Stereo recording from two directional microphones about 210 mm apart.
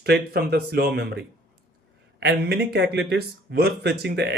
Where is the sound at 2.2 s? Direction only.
55° right (ahead or behind).